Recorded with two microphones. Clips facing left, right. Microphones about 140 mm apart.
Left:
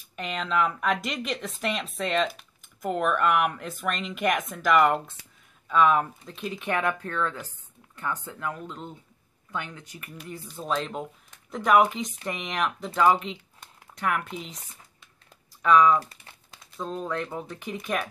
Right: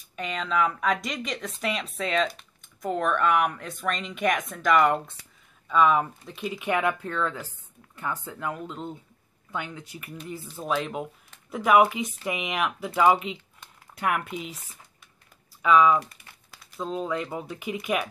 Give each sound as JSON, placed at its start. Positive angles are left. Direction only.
{"t": 0.1, "sound": "speech", "side_deg": 0}
{"t": 6.7, "sound": "speech", "side_deg": -15}
{"t": 8.4, "sound": "speech", "side_deg": -20}
{"t": 8.6, "sound": "speech", "side_deg": -10}
{"t": 10.1, "sound": "speech", "side_deg": 5}
{"t": 15.6, "sound": "speech", "side_deg": -5}